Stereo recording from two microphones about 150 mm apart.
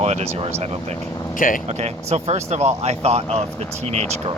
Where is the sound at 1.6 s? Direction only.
45° right (ahead or behind).